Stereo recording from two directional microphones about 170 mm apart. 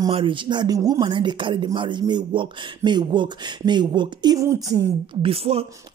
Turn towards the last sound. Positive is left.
turn(degrees=-35)  # may be behind; listen again after turning